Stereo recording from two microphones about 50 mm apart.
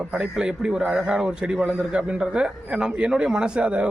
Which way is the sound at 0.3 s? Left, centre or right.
Centre.